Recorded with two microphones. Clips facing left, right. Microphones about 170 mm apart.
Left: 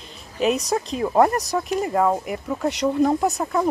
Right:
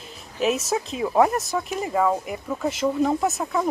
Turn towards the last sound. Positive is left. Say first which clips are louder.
# left 2 dB
turn(degrees=0)  # may be behind; listen again after turning